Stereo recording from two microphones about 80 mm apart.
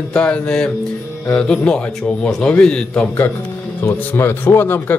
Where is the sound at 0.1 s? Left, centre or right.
Centre.